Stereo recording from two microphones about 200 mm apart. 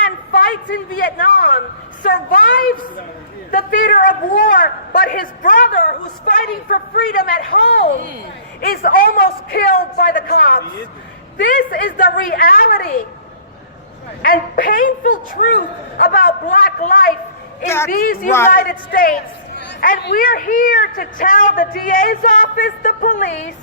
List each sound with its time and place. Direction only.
0.3 s a man's voice: 50° left (ahead or behind)
8.6 s a man's voice: 45° left (ahead or behind)
14.2 s a man's voice: 45° left (ahead or behind)
17.7 s a woman's voice: 10° left (ahead or behind)
17.9 s a man's voice: 45° left (ahead or behind)
18.3 s a woman's voice: 10° left (ahead or behind)
18.5 s a man's voice: 45° left (ahead or behind)